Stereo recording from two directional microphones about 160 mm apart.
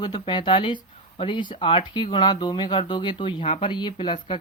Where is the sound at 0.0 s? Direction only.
30° left (ahead or behind).